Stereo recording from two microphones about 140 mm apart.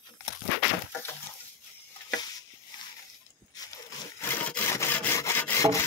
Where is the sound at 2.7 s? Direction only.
30° left (ahead or behind).